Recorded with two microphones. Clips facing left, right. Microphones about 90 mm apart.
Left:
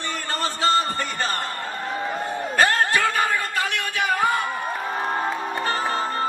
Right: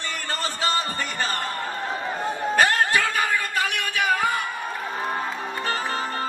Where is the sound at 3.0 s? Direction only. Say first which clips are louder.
Left 2 dB; 25° left (ahead or behind).